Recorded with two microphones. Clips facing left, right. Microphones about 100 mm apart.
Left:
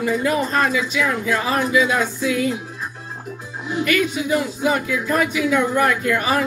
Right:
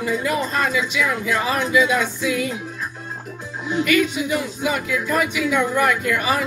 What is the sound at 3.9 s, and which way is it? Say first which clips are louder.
Speech: left 1 dB; 35° left (ahead or behind).